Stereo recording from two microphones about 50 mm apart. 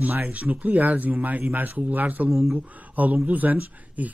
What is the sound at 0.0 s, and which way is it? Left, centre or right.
Speech, right.